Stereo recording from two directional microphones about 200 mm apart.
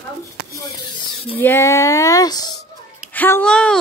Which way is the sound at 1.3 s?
10° left (ahead or behind).